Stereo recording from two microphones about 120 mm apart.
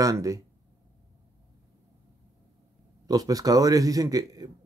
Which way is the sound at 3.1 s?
30° right (ahead or behind).